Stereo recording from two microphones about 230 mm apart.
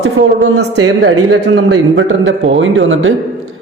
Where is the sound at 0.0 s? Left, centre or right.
Right.